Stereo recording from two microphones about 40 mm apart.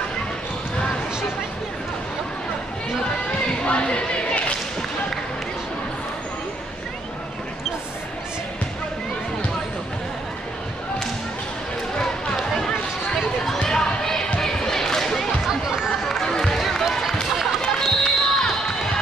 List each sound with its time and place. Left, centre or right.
3.3 s chatter: left
13.6 s a sound: left
14.4 s basketball bounce: centre
15.4 s chatter: centre
16.3 s a sound: centre
16.5 s basketball bounce: centre